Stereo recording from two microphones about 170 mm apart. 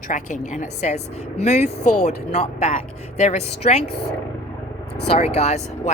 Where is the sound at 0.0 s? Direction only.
50° left (ahead or behind).